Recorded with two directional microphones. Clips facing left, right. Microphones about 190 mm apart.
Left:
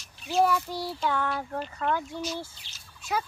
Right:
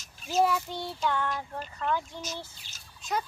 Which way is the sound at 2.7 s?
45° right (ahead or behind).